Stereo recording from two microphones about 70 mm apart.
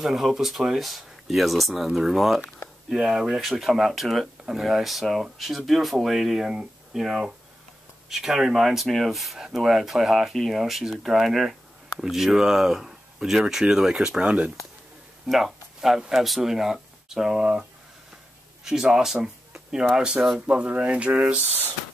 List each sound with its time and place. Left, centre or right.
0.0 s speech: centre
15.2 s a sound: centre
16.0 s speech: centre
20.4 s speech: centre